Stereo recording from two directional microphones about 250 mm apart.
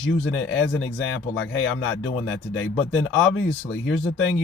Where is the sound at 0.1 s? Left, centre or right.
Left.